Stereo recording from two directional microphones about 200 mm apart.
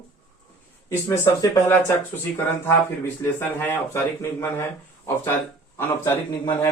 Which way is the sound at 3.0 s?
10° left (ahead or behind).